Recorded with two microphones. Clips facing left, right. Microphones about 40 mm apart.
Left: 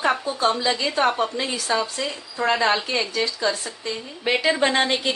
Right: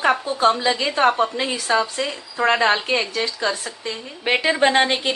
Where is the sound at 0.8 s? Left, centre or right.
Right.